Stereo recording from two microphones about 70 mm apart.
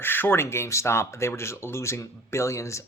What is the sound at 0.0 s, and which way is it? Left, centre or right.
Speech, left.